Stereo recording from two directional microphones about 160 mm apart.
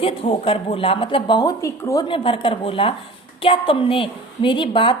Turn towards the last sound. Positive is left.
turn(degrees=30)  # may be behind; listen again after turning